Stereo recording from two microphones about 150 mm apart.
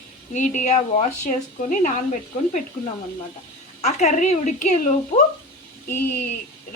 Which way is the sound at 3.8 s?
50° left (ahead or behind).